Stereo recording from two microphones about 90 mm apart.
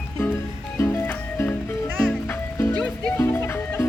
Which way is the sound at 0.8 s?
25° left (ahead or behind).